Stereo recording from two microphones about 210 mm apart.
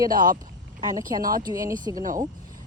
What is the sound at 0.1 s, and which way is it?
Speech, 40° right (ahead or behind).